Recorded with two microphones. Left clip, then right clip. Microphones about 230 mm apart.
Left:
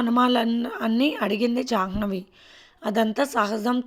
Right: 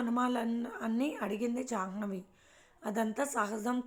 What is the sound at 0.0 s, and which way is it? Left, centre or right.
Speech, left.